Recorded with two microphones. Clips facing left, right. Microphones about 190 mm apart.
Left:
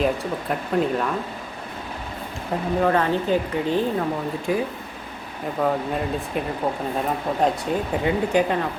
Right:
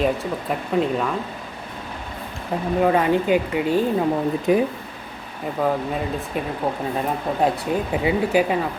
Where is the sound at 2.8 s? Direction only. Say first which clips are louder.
Right 3 dB; 10° right (ahead or behind).